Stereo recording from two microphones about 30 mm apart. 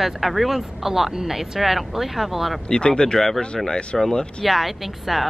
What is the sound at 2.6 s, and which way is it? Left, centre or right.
Speech, left.